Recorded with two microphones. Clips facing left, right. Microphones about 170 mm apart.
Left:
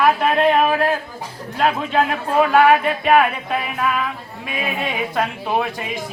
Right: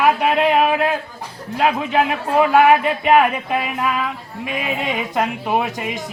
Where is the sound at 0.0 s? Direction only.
10° right (ahead or behind).